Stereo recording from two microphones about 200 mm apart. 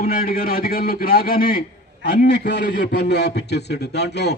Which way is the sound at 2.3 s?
60° left (ahead or behind).